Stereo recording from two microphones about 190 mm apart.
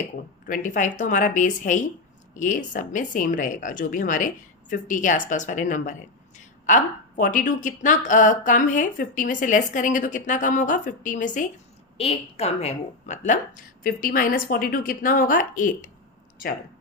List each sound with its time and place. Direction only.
0.4 s a woman's voice: 45° left (ahead or behind)
11.9 s a woman's voice: 30° left (ahead or behind)